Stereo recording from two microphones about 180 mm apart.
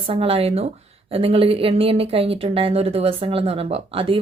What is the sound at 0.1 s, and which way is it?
Speech, 30° right (ahead or behind).